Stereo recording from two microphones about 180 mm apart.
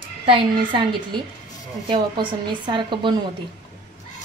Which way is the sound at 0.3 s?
30° right (ahead or behind).